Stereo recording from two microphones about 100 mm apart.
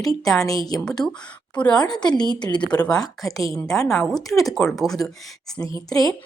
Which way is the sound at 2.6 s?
10° left (ahead or behind).